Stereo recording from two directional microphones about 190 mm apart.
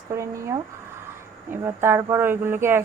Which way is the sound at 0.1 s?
15° right (ahead or behind).